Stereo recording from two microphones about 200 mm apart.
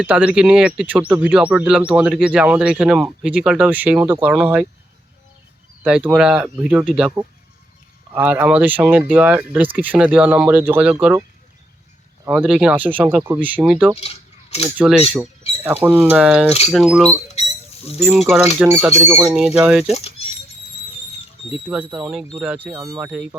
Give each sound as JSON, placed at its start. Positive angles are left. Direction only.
{"t": 0.0, "sound": "speech", "side_deg": -5}
{"t": 5.8, "sound": "speech", "side_deg": -5}
{"t": 12.2, "sound": "speech", "side_deg": -5}
{"t": 14.0, "sound": "a sound", "side_deg": 30}
{"t": 14.8, "sound": "speech", "side_deg": -5}
{"t": 17.4, "sound": "rodents", "side_deg": 30}
{"t": 18.0, "sound": "speech", "side_deg": -5}
{"t": 21.5, "sound": "speech", "side_deg": -5}